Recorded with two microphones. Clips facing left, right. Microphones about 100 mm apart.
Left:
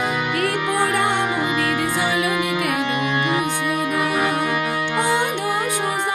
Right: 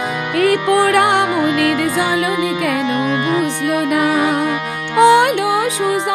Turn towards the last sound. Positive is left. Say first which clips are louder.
# right 9 dB
turn(degrees=-85)